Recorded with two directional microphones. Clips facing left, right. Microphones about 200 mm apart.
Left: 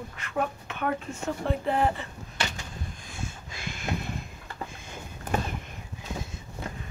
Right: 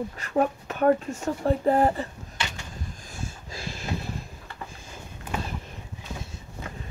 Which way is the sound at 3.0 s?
35° right (ahead or behind).